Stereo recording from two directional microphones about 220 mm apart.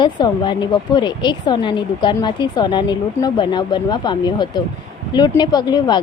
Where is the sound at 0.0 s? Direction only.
20° left (ahead or behind).